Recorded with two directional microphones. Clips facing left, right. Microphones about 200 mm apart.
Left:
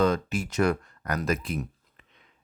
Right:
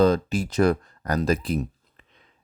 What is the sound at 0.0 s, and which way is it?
Speech, 35° right (ahead or behind).